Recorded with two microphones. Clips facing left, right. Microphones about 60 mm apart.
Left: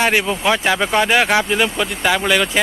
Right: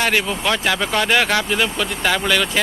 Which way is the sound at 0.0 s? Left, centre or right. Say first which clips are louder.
Left 3 dB; centre.